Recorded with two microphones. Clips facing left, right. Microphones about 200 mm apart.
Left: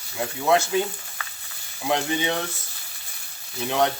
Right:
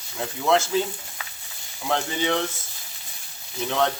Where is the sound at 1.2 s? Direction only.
15° right (ahead or behind).